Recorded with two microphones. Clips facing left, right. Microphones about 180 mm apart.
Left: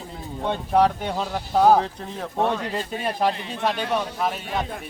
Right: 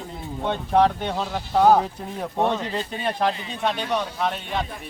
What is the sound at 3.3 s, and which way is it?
Speech, 60° left (ahead or behind).